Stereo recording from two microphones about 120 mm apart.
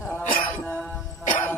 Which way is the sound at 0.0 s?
15° left (ahead or behind).